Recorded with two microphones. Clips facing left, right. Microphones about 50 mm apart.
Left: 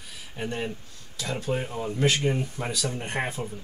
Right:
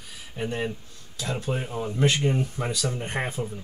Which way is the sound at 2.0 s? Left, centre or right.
Centre.